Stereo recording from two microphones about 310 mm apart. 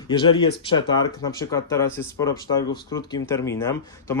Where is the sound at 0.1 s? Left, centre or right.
Centre.